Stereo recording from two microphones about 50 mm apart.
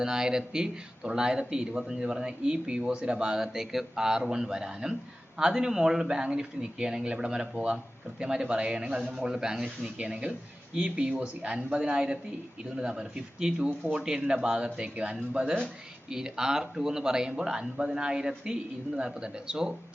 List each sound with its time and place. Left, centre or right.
0.0 s speech: centre